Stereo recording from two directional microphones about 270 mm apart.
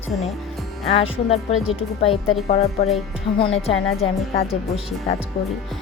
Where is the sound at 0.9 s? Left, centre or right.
Left.